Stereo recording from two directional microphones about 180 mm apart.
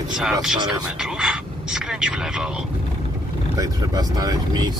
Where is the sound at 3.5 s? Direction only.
20° right (ahead or behind).